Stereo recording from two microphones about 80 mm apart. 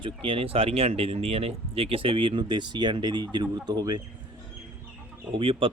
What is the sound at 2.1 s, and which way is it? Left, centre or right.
Speech, right.